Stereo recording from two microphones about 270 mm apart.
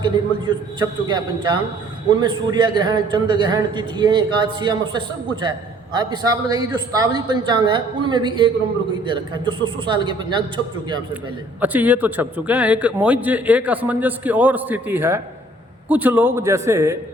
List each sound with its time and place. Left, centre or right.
0.0 s a man's voice: centre
11.6 s a man's voice: centre